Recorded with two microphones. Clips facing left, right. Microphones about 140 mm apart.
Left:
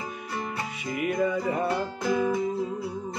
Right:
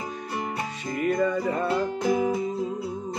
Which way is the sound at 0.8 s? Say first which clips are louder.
Right 2 dB; 5° left (ahead or behind).